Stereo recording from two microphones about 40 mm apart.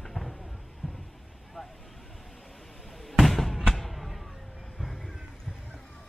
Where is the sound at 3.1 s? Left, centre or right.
Centre.